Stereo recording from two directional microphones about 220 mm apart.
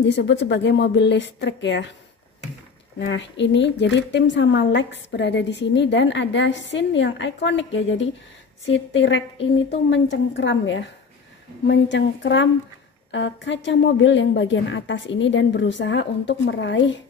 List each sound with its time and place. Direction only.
0.0 s speech: 55° left (ahead or behind)
3.0 s a woman's voice: 55° left (ahead or behind)